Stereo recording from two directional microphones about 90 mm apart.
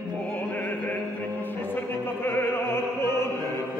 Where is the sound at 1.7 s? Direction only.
25° left (ahead or behind).